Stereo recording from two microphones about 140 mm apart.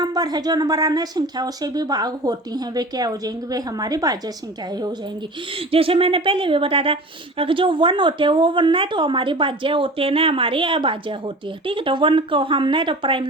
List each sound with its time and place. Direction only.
0.0 s speech: 30° right (ahead or behind)
5.5 s a woman's voice: 40° right (ahead or behind)